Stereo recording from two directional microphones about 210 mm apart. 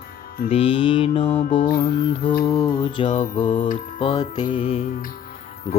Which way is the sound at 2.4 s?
20° left (ahead or behind).